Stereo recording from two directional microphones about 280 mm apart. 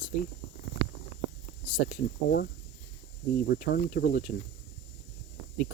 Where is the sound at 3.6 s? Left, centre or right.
Left.